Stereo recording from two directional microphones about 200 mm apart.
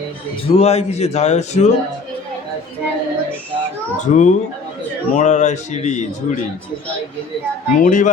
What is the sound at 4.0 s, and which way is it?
Speech, 35° left (ahead or behind).